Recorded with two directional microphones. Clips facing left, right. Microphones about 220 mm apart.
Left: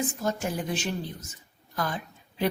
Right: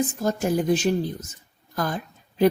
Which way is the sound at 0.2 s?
40° right (ahead or behind).